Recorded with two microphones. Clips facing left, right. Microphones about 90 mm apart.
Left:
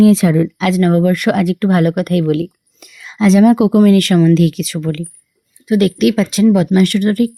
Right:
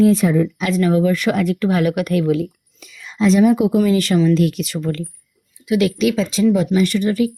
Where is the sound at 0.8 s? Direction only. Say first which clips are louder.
Left 2 dB; 50° left (ahead or behind).